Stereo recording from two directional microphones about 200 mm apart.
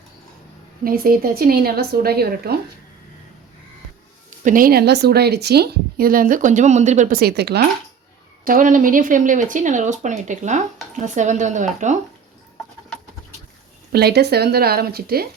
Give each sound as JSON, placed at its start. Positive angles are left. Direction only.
{"t": 0.9, "sound": "a woman's voice", "side_deg": -45}
{"t": 4.4, "sound": "a woman's voice", "side_deg": -45}
{"t": 8.4, "sound": "speech", "side_deg": -40}
{"t": 13.9, "sound": "a woman's voice", "side_deg": -55}